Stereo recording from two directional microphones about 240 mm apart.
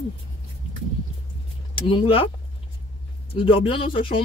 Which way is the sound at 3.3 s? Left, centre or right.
Left.